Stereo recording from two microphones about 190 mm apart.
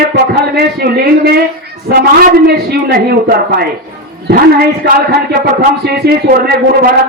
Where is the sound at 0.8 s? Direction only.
55° right (ahead or behind).